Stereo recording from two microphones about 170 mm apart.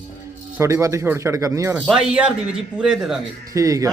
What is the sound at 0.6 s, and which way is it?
A man's voice, 15° right (ahead or behind).